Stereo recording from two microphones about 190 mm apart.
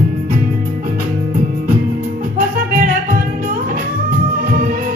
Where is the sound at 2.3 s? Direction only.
45° right (ahead or behind).